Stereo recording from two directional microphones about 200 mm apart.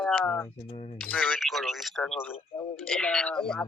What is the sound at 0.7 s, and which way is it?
Speech, 30° left (ahead or behind).